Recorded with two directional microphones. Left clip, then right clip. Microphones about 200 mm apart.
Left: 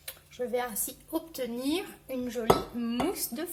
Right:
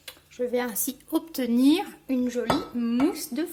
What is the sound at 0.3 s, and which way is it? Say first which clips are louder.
A woman's voice: right 4 dB; 45° right (ahead or behind).